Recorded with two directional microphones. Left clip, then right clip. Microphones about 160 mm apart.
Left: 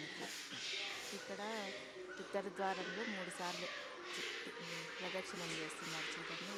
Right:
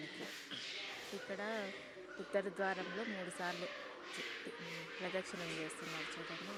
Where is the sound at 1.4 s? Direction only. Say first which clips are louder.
Right 2 dB; 5° right (ahead or behind).